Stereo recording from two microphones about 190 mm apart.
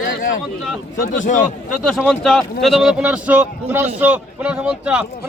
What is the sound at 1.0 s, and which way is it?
Speech, 40° left (ahead or behind).